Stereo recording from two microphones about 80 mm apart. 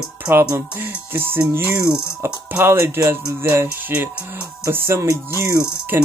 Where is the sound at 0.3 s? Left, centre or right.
Right.